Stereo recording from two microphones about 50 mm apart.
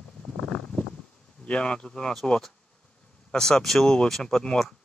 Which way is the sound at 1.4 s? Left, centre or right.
Left.